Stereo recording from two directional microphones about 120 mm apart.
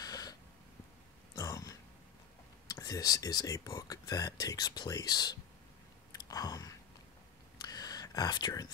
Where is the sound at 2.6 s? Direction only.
30° left (ahead or behind).